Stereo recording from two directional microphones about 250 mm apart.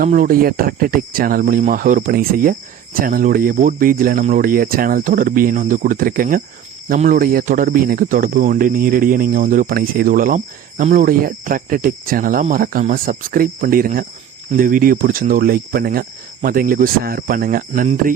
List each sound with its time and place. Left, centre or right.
0.0 s speech: right